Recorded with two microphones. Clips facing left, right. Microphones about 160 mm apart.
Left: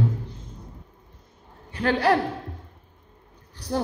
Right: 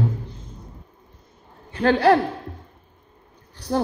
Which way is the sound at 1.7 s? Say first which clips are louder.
Right 5 dB; 30° right (ahead or behind).